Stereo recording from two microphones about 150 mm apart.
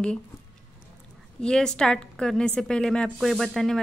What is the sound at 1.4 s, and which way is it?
A woman's voice, 5° left (ahead or behind).